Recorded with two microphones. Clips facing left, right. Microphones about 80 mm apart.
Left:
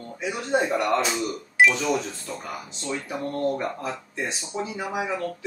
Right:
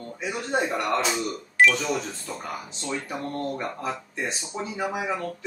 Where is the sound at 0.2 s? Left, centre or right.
Centre.